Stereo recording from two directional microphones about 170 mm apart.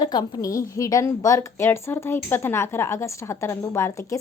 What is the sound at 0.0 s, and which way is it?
A woman's voice, 25° left (ahead or behind).